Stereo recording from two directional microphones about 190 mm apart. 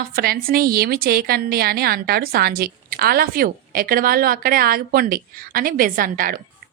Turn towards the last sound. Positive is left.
turn(degrees=-50)  # may be behind; listen again after turning